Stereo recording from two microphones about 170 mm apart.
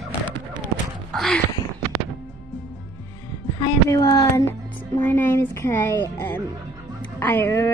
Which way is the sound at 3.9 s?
15° left (ahead or behind).